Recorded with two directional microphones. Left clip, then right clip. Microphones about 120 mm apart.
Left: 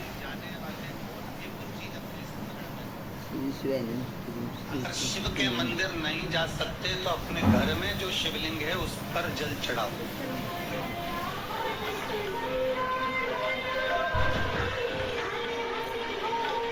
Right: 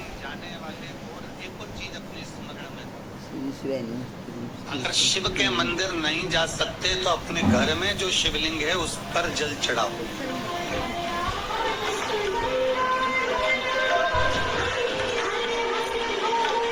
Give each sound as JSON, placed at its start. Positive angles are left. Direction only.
{"t": 4.7, "sound": "speech", "side_deg": -35}
{"t": 10.5, "sound": "music", "side_deg": -35}